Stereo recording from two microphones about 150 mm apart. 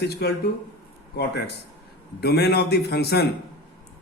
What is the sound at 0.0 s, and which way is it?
Speech, 90° left.